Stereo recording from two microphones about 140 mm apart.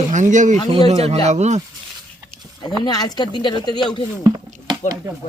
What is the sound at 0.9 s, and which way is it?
Speech, 45° right (ahead or behind).